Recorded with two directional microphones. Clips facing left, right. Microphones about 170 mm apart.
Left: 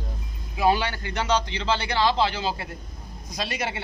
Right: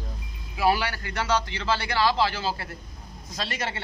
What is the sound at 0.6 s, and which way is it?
A man's voice, 20° left (ahead or behind).